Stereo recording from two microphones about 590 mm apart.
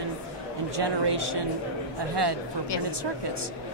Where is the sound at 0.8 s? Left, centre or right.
Right.